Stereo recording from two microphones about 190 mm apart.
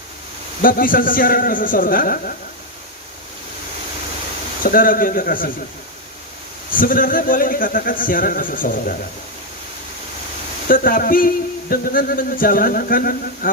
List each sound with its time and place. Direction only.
0.6 s a man's voice: 45° left (ahead or behind)
4.6 s a man's voice: 45° left (ahead or behind)
6.7 s a man's voice: 45° left (ahead or behind)
10.7 s a man's voice: 50° left (ahead or behind)